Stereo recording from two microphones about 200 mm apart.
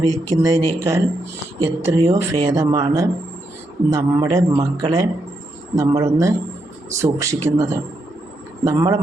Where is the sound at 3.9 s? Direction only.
15° right (ahead or behind).